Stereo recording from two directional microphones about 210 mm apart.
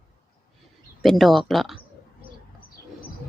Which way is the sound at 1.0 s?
Centre (ahead or behind).